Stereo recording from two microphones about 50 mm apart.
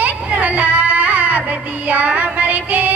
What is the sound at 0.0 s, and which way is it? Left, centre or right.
Music, right.